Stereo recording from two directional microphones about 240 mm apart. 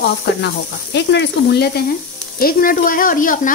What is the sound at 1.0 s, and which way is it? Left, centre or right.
Speech, left.